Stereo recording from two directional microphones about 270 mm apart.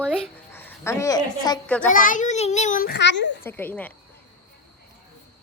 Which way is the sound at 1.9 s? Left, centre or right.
Left.